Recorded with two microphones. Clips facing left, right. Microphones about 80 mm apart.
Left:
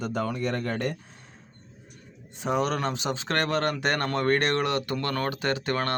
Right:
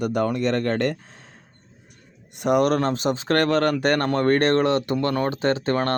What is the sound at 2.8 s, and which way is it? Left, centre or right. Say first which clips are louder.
Speech: right 6 dB; right.